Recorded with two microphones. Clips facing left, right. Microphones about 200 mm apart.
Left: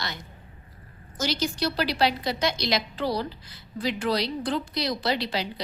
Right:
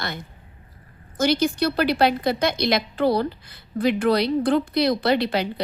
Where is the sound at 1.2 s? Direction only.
55° right (ahead or behind).